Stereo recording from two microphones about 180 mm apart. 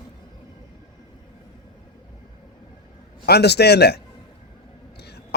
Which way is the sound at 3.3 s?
65° left (ahead or behind).